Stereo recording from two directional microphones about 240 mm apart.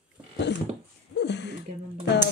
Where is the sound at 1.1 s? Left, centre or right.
Left.